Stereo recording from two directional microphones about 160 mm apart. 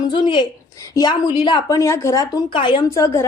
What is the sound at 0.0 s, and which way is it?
A woman's voice, 30° left (ahead or behind).